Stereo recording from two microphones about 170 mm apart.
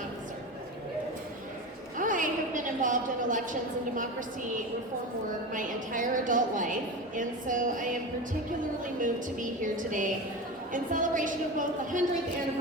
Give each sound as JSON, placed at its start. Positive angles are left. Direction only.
{"t": 2.0, "sound": "a sound", "side_deg": -50}
{"t": 5.5, "sound": "a woman's voice", "side_deg": -50}
{"t": 9.0, "sound": "a woman's voice", "side_deg": -50}